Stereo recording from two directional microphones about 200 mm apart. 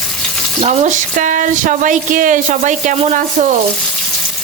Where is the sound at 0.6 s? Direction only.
35° right (ahead or behind).